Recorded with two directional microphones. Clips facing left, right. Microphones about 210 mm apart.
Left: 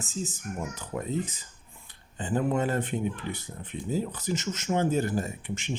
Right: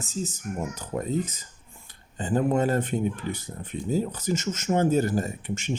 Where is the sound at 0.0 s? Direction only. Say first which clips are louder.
Right 3 dB; 40° right (ahead or behind).